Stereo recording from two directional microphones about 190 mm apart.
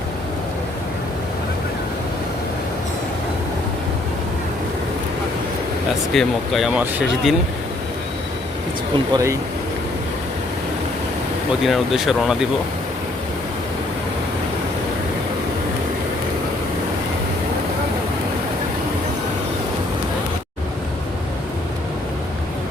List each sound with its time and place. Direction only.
6.1 s speech: centre (ahead or behind)
9.1 s speech: 15° right (ahead or behind)
11.6 s speech: centre (ahead or behind)